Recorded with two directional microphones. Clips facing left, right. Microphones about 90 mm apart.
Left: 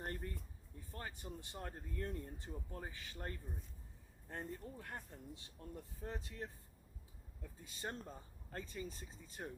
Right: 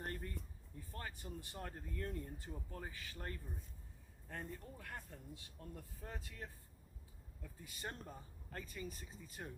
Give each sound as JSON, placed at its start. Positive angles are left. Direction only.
{"t": 0.0, "sound": "a sound", "side_deg": 25}
{"t": 0.9, "sound": "speech", "side_deg": 25}
{"t": 7.6, "sound": "speech", "side_deg": 25}